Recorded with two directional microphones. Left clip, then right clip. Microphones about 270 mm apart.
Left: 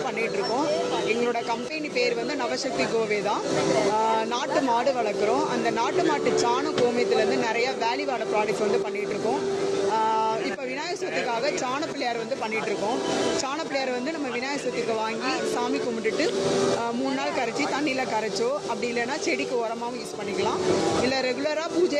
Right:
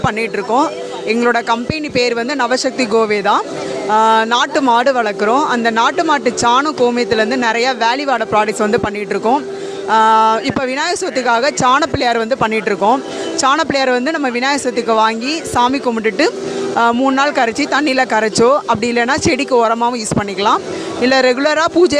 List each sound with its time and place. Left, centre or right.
1.2 s speech: right
9.9 s speech: right
21.0 s speech: right